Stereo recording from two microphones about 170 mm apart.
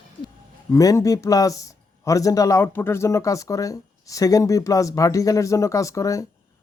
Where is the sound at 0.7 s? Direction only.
20° left (ahead or behind).